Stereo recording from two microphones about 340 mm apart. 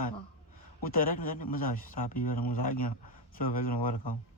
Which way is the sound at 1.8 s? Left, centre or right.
Left.